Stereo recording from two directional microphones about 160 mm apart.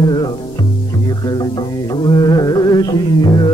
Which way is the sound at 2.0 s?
25° left (ahead or behind).